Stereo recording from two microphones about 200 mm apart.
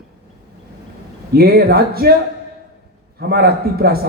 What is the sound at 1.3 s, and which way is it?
Speech, 50° right (ahead or behind).